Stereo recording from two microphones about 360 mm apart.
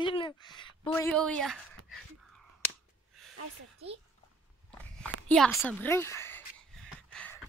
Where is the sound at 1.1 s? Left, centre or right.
Centre.